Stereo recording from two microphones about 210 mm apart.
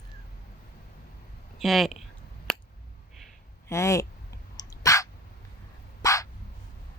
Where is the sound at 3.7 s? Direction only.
15° left (ahead or behind).